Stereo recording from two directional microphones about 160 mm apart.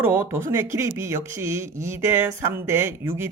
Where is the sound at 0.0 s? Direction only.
15° right (ahead or behind).